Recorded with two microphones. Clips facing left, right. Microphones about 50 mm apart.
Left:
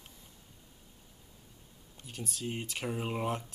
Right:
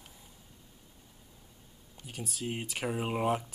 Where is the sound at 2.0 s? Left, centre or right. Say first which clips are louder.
Right 1 dB; centre.